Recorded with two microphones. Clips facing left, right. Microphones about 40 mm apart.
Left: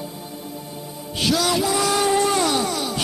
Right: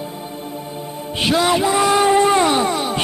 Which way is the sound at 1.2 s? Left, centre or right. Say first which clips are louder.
Right 4 dB; right.